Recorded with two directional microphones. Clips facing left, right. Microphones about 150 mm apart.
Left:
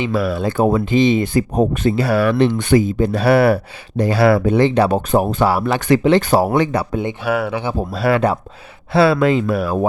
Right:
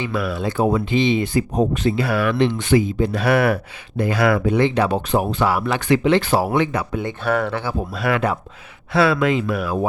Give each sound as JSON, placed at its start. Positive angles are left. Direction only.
{"t": 0.1, "sound": "speech", "side_deg": 35}
{"t": 3.2, "sound": "speech", "side_deg": 30}
{"t": 6.9, "sound": "speech", "side_deg": 20}
{"t": 7.3, "sound": "speech", "side_deg": 10}
{"t": 7.8, "sound": "speech", "side_deg": 35}